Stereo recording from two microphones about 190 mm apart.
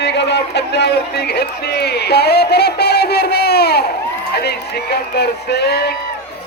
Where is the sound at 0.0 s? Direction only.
65° left (ahead or behind).